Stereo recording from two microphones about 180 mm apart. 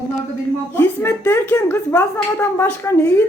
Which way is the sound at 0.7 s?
10° left (ahead or behind).